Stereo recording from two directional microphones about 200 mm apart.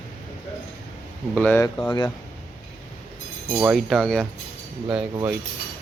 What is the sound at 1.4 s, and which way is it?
Speech, 10° left (ahead or behind).